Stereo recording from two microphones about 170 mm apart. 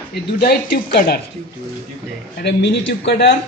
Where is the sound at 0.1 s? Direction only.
65° left (ahead or behind).